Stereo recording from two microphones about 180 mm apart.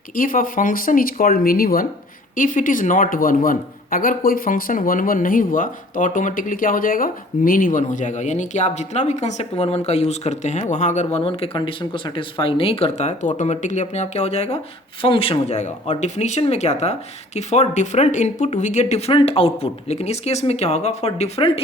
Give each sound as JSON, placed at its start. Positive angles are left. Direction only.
{"t": 0.2, "sound": "speech", "side_deg": 50}